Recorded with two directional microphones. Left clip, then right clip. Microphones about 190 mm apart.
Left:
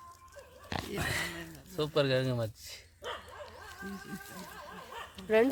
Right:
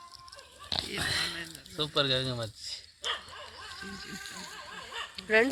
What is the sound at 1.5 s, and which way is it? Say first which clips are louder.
Speech: even; 20° left (ahead or behind).